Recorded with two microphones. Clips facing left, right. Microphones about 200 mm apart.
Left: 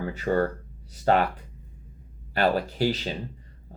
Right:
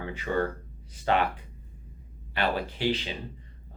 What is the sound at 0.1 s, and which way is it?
Speech, 40° left (ahead or behind).